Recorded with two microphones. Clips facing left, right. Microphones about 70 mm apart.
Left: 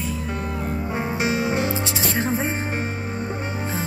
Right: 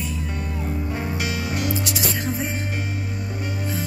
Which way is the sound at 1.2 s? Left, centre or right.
Left.